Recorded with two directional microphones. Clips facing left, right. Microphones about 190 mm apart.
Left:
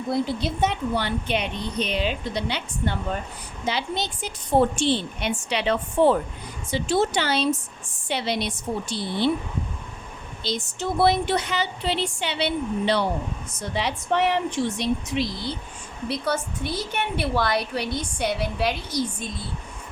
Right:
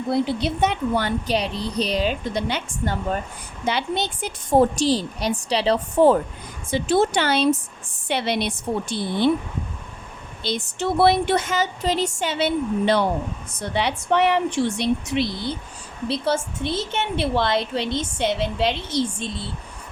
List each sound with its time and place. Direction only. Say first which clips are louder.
0.1 s a woman's voice: right 3 dB; 65° right (ahead or behind)
0.9 s a woman's voice: right 3 dB; 40° right (ahead or behind)
6.7 s a woman's voice: right 3 dB; 55° right (ahead or behind)
10.4 s speech: right 3 dB; 60° right (ahead or behind)
13.6 s a woman's voice: right 3 dB; 65° right (ahead or behind)
16.0 s a woman's voice: right 3 dB; 25° right (ahead or behind)